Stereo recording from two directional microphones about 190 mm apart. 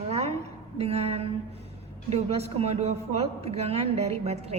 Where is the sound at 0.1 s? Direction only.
35° right (ahead or behind).